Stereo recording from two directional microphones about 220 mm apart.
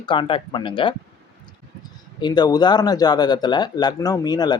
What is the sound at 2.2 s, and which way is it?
Speech, 20° left (ahead or behind).